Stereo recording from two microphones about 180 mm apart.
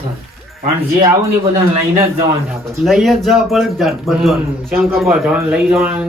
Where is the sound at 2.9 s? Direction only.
Centre (ahead or behind).